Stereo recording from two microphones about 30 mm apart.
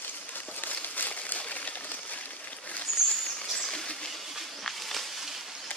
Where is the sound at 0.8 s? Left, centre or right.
Left.